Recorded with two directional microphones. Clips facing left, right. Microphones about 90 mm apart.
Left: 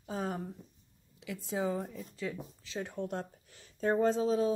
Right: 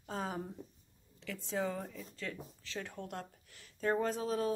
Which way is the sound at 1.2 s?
10° left (ahead or behind).